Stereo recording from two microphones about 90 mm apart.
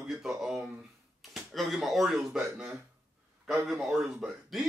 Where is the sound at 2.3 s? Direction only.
10° right (ahead or behind).